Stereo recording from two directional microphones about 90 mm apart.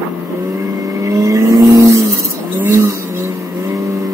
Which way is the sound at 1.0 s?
35° right (ahead or behind).